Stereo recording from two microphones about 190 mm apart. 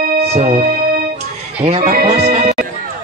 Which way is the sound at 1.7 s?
35° right (ahead or behind).